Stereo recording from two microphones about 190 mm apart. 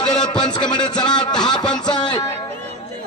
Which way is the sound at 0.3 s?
20° left (ahead or behind).